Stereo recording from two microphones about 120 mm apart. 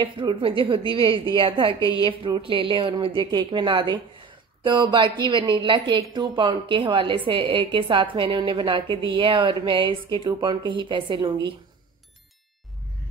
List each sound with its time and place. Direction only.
0.0 s a woman's voice: 45° right (ahead or behind)
1.8 s a woman's voice: 30° left (ahead or behind)
2.0 s a woman's voice: 45° right (ahead or behind)